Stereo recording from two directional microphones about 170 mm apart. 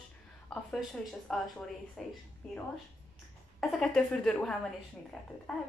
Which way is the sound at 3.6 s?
5° left (ahead or behind).